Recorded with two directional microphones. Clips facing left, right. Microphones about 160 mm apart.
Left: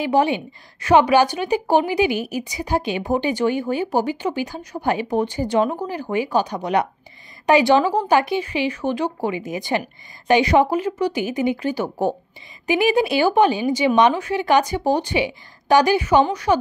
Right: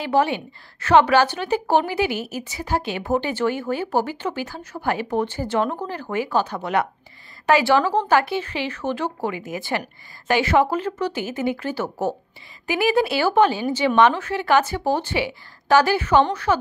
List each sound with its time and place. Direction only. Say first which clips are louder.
0.0 s a woman's voice: left 2 dB; 15° left (ahead or behind)